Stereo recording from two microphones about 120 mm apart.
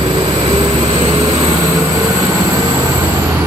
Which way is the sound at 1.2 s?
30° right (ahead or behind).